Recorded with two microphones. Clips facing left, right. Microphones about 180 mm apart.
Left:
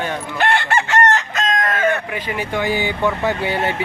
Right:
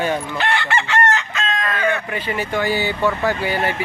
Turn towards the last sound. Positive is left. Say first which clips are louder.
# left 1 dB
turn(degrees=25)  # may be behind; listen again after turning